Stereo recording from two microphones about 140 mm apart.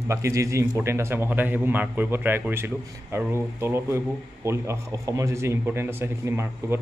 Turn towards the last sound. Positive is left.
turn(degrees=-15)  # may be behind; listen again after turning